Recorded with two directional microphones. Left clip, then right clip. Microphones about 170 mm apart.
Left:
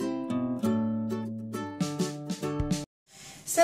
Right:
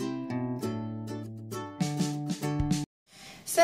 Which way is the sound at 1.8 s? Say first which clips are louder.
Right 1 dB; centre (ahead or behind).